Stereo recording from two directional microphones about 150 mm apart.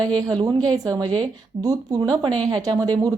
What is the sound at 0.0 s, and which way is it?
Speech, 30° right (ahead or behind).